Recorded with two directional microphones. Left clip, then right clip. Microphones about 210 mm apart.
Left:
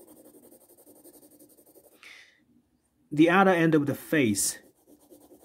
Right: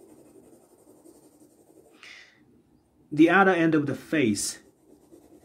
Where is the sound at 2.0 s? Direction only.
30° left (ahead or behind).